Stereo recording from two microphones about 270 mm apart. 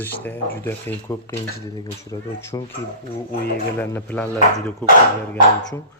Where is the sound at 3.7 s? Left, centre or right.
Centre.